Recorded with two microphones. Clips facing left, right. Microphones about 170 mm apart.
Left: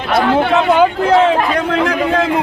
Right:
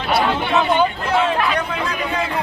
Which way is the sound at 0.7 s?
90° left.